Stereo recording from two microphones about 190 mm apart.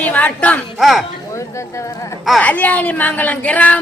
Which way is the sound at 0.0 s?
10° left (ahead or behind).